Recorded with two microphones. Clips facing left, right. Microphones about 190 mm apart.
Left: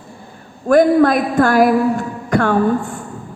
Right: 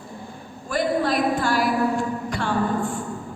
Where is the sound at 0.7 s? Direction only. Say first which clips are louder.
Left 11 dB; 50° left (ahead or behind).